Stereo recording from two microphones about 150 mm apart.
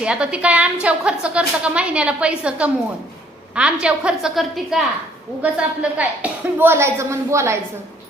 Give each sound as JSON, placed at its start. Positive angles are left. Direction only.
{"t": 0.0, "sound": "a woman's voice", "side_deg": -5}